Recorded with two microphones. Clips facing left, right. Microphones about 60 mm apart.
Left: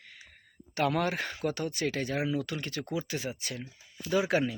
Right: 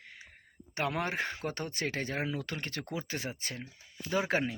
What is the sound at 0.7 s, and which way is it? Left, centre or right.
Speech, right.